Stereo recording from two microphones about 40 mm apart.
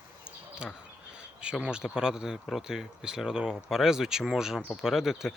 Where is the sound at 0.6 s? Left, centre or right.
Right.